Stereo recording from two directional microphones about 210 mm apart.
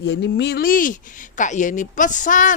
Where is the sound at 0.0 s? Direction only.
55° left (ahead or behind).